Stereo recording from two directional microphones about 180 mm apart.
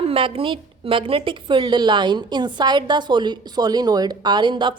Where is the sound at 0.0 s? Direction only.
30° right (ahead or behind).